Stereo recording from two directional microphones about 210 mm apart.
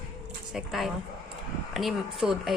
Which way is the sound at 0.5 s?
Centre (ahead or behind).